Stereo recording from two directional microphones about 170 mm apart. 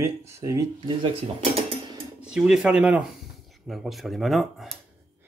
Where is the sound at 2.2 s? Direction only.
5° right (ahead or behind).